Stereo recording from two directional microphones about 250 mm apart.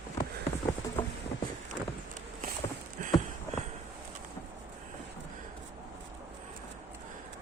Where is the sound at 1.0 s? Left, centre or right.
Centre.